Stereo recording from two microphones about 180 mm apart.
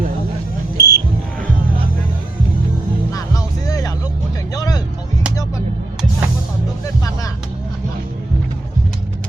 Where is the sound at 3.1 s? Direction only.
20° left (ahead or behind).